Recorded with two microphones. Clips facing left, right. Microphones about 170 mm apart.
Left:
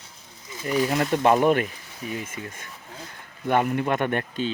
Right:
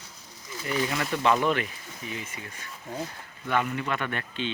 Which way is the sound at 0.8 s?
45° left (ahead or behind).